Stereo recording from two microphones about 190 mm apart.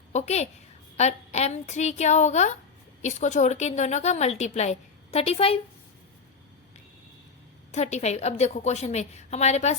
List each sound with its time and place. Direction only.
0.1 s a child's voice: 35° left (ahead or behind)
7.7 s a woman's voice: 35° left (ahead or behind)